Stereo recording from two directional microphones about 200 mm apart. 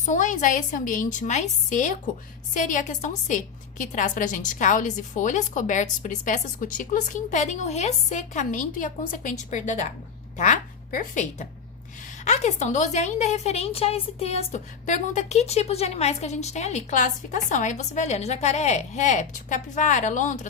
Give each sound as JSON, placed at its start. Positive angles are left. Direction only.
{"t": 0.0, "sound": "a woman's voice", "side_deg": 40}